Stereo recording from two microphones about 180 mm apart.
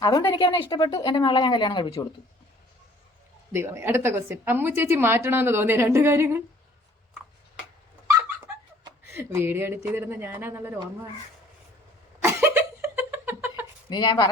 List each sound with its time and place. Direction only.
0.0 s speech: 20° left (ahead or behind)
3.5 s a woman's voice: 15° right (ahead or behind)
8.8 s speech: 15° right (ahead or behind)
12.2 s a sound: 15° right (ahead or behind)
13.9 s speech: 25° left (ahead or behind)